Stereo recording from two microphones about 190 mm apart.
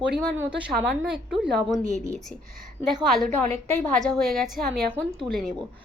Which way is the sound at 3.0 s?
Centre (ahead or behind).